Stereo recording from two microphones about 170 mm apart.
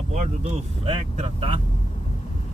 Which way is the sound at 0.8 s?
30° right (ahead or behind).